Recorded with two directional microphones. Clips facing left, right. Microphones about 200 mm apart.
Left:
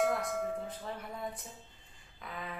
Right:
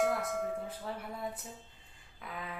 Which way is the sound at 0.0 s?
Centre (ahead or behind).